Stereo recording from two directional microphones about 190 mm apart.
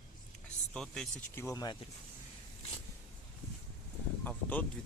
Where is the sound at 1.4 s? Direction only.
15° left (ahead or behind).